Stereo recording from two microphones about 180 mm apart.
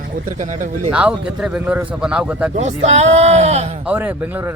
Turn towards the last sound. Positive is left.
turn(degrees=-10)  # may be behind; listen again after turning